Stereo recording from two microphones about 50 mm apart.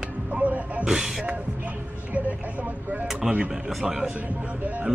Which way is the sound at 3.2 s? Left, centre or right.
Centre.